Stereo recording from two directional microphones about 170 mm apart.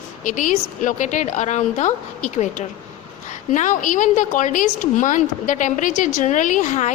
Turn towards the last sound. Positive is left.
turn(degrees=45)  # may be behind; listen again after turning